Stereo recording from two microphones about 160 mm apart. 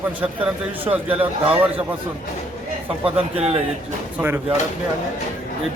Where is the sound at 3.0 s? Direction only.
40° right (ahead or behind).